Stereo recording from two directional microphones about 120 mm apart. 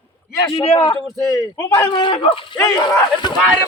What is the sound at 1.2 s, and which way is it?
Speech, 30° left (ahead or behind).